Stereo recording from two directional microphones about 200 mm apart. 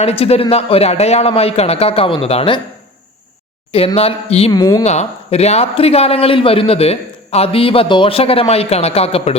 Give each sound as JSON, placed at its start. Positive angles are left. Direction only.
{"t": 0.0, "sound": "a man's voice", "side_deg": 30}
{"t": 3.7, "sound": "a man's voice", "side_deg": 30}
{"t": 4.5, "sound": "speech", "side_deg": 20}
{"t": 4.8, "sound": "a man's voice", "side_deg": 30}